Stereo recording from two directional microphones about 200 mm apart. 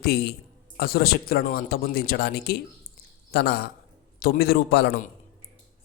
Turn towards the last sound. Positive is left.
turn(degrees=50)  # may be behind; listen again after turning